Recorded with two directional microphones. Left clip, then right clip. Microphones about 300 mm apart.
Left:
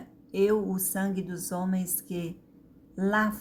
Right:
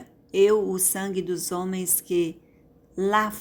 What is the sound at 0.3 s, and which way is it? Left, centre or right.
A man's voice, right.